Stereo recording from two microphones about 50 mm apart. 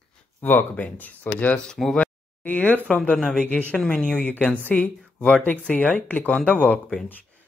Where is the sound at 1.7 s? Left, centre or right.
Centre.